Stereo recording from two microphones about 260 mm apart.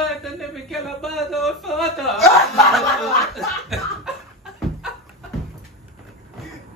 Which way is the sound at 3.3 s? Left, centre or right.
Centre.